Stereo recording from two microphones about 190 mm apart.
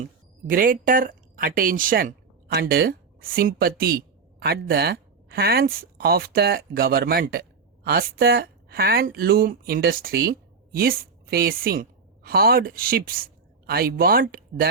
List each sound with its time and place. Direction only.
0.0 s a woman's voice: 45° right (ahead or behind)